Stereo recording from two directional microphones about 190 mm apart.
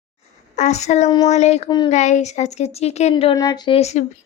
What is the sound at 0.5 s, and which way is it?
Speech, 35° left (ahead or behind).